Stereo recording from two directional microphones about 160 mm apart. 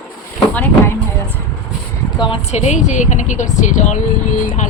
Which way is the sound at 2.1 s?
30° left (ahead or behind).